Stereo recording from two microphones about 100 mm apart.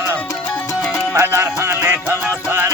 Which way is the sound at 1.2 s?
25° right (ahead or behind).